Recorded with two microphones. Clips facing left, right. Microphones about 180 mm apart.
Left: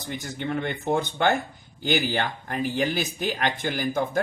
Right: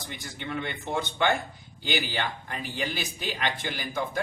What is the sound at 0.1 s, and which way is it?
Speech, 50° left (ahead or behind).